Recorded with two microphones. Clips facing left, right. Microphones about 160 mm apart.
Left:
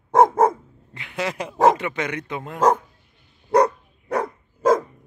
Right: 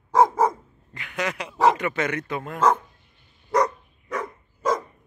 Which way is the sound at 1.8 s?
15° left (ahead or behind).